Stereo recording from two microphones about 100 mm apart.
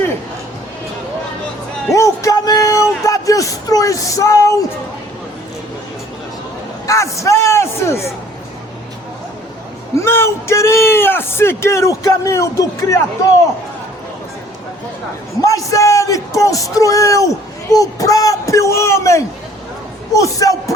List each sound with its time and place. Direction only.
1.9 s a sound: 30° left (ahead or behind)
3.0 s speech: 35° left (ahead or behind)
6.8 s a man's voice: 30° left (ahead or behind)
9.9 s a man's voice: 25° left (ahead or behind)
15.4 s speech: 35° left (ahead or behind)